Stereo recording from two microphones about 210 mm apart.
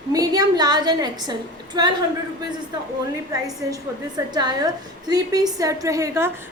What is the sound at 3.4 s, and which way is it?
A woman's voice, 20° right (ahead or behind).